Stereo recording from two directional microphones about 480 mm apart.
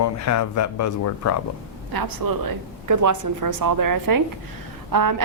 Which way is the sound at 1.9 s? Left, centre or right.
Right.